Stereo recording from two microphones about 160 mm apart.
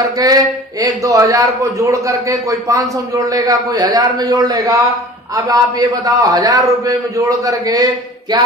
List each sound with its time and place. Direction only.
0.0 s speech: 20° right (ahead or behind)